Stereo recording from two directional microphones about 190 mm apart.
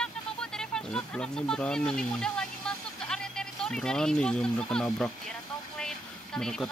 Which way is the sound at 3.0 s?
5° left (ahead or behind).